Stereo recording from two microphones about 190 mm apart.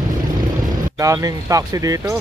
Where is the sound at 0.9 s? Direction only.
15° right (ahead or behind).